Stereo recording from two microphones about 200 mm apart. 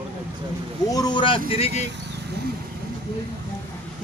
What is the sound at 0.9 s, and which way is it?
Speech, 20° left (ahead or behind).